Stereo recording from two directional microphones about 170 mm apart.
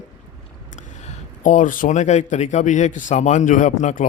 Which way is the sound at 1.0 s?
45° left (ahead or behind).